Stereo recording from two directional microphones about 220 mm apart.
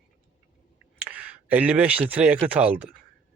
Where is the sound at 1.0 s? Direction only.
5° right (ahead or behind).